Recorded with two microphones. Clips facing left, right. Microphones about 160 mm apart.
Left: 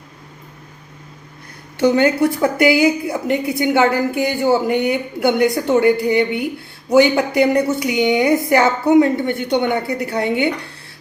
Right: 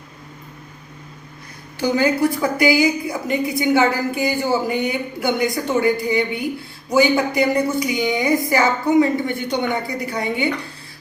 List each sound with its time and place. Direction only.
1.8 s a woman's voice: 70° left (ahead or behind)